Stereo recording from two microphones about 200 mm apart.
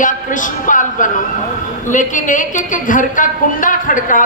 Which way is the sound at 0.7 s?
40° left (ahead or behind).